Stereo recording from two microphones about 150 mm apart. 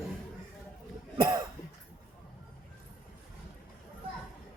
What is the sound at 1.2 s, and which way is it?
Cough, 30° right (ahead or behind).